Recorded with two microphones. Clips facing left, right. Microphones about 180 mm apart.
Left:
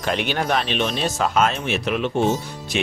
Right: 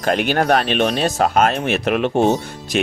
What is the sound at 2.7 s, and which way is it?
Speech, 45° right (ahead or behind).